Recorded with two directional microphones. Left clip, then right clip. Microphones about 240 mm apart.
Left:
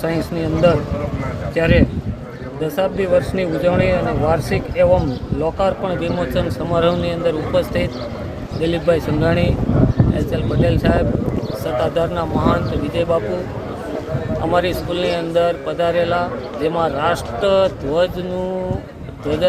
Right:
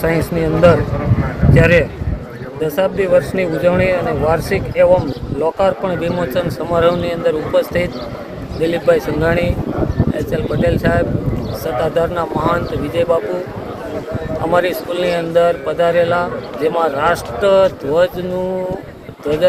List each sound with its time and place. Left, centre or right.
0.0 s speech: centre
8.6 s speech: centre
14.5 s speech: centre